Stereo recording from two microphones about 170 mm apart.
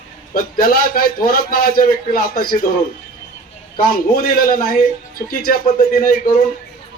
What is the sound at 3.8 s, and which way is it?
A man's voice, 60° left (ahead or behind).